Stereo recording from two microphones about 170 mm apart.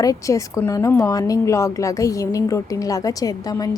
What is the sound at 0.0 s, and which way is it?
Speech, 20° left (ahead or behind).